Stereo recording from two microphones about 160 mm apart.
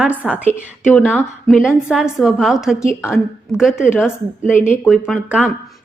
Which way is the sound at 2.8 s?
15° left (ahead or behind).